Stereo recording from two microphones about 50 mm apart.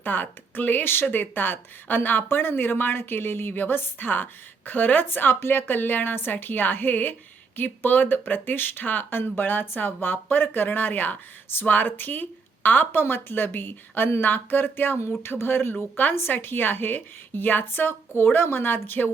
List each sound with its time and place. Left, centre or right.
0.0 s a woman's voice: left
15.7 s speech: left
16.1 s a woman's voice: left